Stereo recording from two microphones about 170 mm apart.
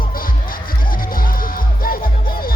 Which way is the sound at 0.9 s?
55° left (ahead or behind).